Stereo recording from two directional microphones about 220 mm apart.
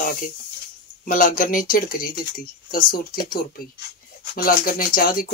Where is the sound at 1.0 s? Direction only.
40° left (ahead or behind).